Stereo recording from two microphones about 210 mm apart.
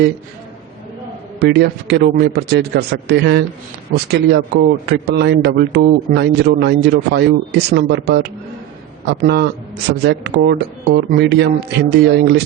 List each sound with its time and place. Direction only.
1.4 s a man's voice: 50° right (ahead or behind)